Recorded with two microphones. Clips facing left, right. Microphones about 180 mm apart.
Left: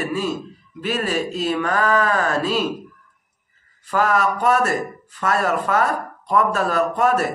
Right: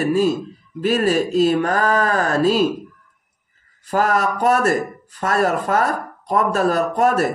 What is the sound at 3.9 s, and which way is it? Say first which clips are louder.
Speech: right 1 dB; 40° right (ahead or behind).